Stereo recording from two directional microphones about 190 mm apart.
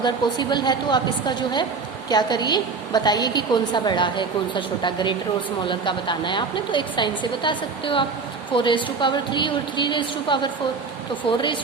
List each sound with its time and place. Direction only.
0.0 s a woman's voice: 25° left (ahead or behind)